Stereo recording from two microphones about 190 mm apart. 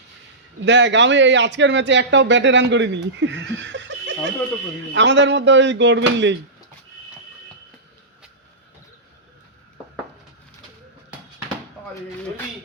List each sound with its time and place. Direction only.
0.6 s speech: 70° right (ahead or behind)
3.2 s laughter: 70° right (ahead or behind)
4.9 s speech: 70° right (ahead or behind)